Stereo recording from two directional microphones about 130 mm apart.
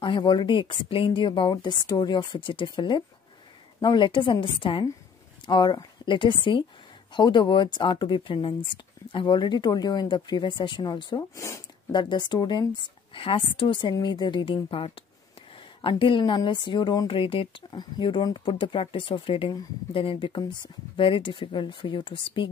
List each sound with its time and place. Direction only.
0.0 s speech: 40° left (ahead or behind)
11.9 s speech: 35° left (ahead or behind)